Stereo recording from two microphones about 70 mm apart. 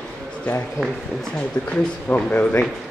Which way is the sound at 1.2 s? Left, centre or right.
Centre.